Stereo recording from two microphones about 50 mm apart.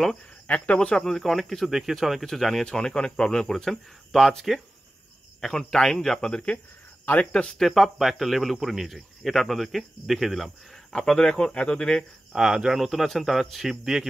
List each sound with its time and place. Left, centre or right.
0.7 s speech: centre
1.7 s speech: centre
2.6 s speech: centre
7.1 s speech: left
7.5 s speech: centre
10.9 s speech: centre
12.3 s speech: centre